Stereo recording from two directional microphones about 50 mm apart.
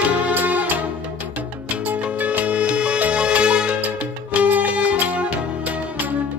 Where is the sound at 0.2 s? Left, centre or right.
Right.